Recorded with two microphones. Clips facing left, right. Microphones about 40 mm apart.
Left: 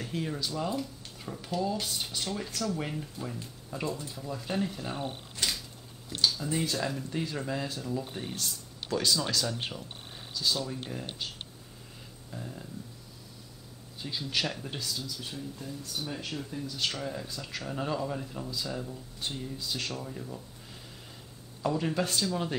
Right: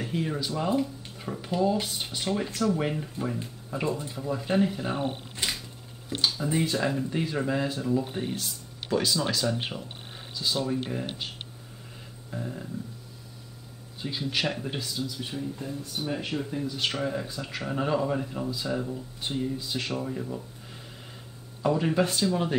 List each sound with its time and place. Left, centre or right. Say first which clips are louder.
0.0 s speech: right 4 dB; centre
14.0 s speech: right 3 dB; centre
21.6 s speech: right 5 dB; centre